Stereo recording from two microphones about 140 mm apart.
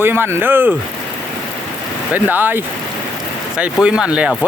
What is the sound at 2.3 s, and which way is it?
Speech, 15° right (ahead or behind).